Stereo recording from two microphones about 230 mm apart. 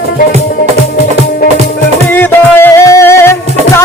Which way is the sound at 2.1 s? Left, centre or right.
Centre.